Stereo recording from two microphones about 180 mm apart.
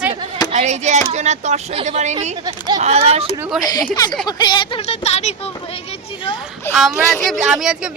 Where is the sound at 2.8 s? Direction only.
35° right (ahead or behind).